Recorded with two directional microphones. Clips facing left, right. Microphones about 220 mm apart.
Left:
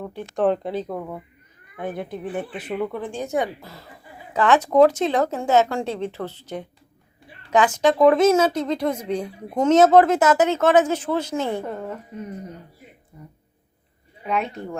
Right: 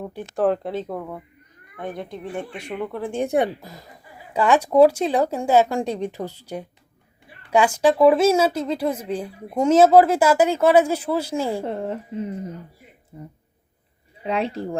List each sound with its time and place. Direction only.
0.0 s speech: 10° right (ahead or behind)
0.4 s speech: centre (ahead or behind)
3.1 s a woman's voice: 25° right (ahead or behind); by 11.6 s 10° right (ahead or behind)
11.6 s a woman's voice: 30° right (ahead or behind)
14.3 s speech: 30° right (ahead or behind)